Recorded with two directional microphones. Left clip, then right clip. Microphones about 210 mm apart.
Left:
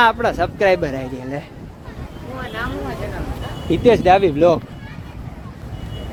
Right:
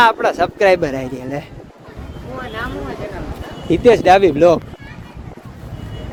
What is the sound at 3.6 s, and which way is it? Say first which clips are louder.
Speech: right 3 dB; 15° right (ahead or behind).